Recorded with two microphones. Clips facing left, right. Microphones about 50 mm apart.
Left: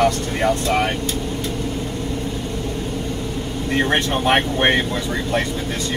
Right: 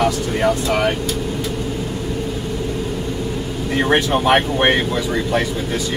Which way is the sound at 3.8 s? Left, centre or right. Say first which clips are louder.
Right 3 dB; centre.